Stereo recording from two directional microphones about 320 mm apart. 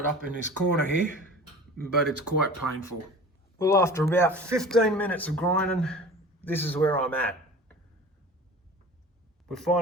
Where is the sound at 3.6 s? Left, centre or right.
Centre.